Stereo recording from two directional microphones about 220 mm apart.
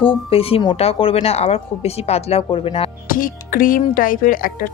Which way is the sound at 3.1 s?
40° left (ahead or behind).